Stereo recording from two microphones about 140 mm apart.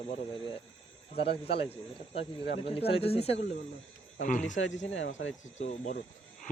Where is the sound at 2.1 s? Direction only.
45° left (ahead or behind).